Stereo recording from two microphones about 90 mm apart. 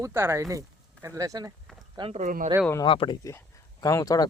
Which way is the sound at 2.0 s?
55° right (ahead or behind).